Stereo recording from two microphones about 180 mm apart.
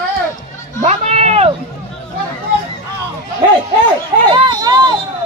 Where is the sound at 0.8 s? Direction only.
35° right (ahead or behind).